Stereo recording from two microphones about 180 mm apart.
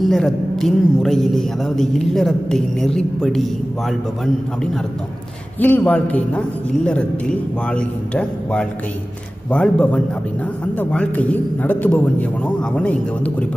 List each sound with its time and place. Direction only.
0.0 s a man's voice: centre (ahead or behind)
5.6 s a man's voice: 10° left (ahead or behind)